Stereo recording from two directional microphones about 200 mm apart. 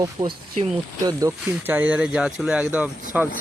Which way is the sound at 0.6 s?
30° right (ahead or behind).